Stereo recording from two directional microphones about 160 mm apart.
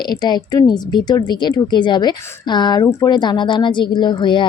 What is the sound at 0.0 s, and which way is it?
A woman's voice, 25° left (ahead or behind).